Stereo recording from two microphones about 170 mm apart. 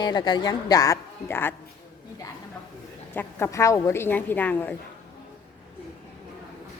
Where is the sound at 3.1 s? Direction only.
15° left (ahead or behind).